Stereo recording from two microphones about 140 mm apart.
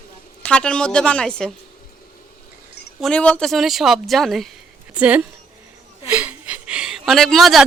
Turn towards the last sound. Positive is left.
turn(degrees=0)  # may be behind; listen again after turning